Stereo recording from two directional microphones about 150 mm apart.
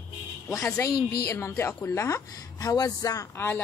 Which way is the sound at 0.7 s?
25° left (ahead or behind).